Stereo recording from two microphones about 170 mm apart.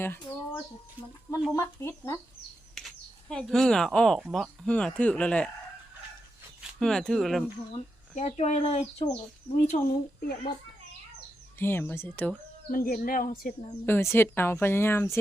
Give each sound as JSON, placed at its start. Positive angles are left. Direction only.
{"t": 0.0, "sound": "a sound", "side_deg": 15}
{"t": 1.5, "sound": "speech", "side_deg": 15}
{"t": 2.7, "sound": "speech", "side_deg": 5}
{"t": 6.6, "sound": "speech", "side_deg": 5}
{"t": 8.1, "sound": "speech", "side_deg": 40}
{"t": 9.6, "sound": "speech", "side_deg": 50}
{"t": 11.6, "sound": "speech", "side_deg": 15}
{"t": 12.7, "sound": "speech", "side_deg": 55}
{"t": 13.8, "sound": "speech", "side_deg": 15}